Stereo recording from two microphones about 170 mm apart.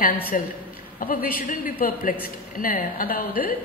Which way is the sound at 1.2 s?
60° left (ahead or behind).